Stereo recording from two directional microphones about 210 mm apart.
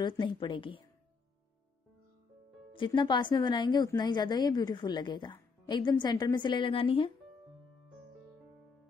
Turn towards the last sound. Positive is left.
turn(degrees=25)  # may be behind; listen again after turning